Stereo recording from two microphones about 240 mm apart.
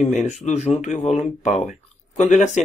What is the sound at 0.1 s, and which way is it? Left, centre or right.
Speech, left.